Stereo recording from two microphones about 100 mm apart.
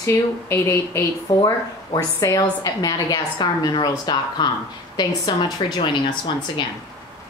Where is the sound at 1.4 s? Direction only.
40° left (ahead or behind).